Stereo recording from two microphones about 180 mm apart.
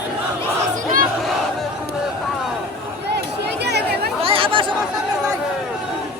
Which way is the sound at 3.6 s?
65° right (ahead or behind).